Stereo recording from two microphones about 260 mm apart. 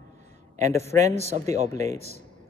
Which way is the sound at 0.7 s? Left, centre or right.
Centre.